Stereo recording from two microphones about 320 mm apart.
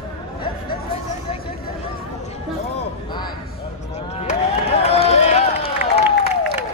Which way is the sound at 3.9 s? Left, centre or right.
Centre.